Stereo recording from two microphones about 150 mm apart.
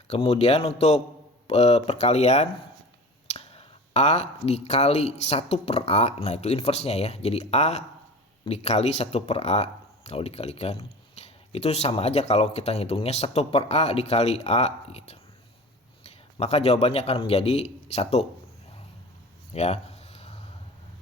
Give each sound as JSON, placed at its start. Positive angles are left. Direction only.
{"t": 0.1, "sound": "speech", "side_deg": 40}
{"t": 16.4, "sound": "speech", "side_deg": 45}
{"t": 19.5, "sound": "a sound", "side_deg": 45}